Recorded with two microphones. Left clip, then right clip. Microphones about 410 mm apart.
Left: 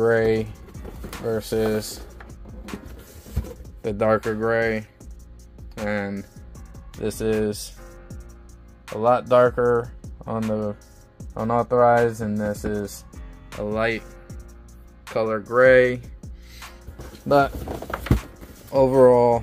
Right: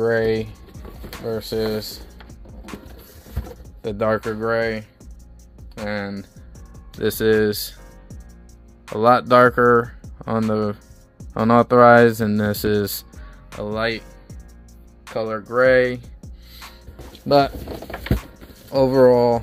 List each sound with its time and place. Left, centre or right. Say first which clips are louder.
0.0 s speech: even; centre
1.1 s music: even; centre
3.8 s speech: even; centre
7.0 s speech: right 6 dB; centre
9.0 s speech: right 4 dB; centre
10.1 s music: right 5 dB; centre
10.5 s speech: right 4 dB; centre
13.5 s speech: even; centre
15.0 s music: left 1 dB; centre
17.3 s speech: right 2 dB; centre
18.1 s a sound: even; centre